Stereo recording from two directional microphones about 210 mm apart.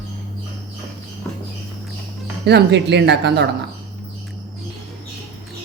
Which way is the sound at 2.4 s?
55° right (ahead or behind).